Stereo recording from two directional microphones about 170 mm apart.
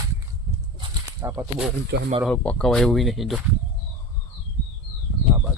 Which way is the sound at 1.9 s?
90° right.